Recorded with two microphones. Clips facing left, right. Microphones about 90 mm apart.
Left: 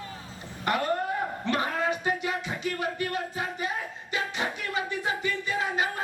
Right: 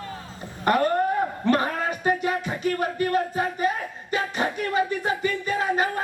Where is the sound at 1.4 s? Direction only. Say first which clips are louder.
Right 4 dB; 45° right (ahead or behind).